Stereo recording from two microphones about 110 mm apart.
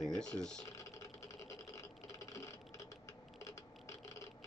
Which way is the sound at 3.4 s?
30° left (ahead or behind).